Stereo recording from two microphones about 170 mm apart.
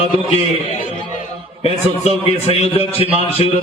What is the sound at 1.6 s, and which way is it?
Speech, 35° left (ahead or behind).